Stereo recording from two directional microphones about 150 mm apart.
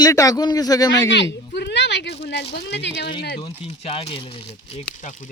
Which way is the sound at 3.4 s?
35° left (ahead or behind).